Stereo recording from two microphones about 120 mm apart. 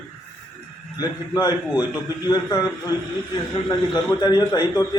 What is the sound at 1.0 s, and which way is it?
A man's voice, 30° left (ahead or behind).